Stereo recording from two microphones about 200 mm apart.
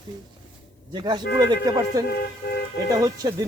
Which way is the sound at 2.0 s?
50° left (ahead or behind).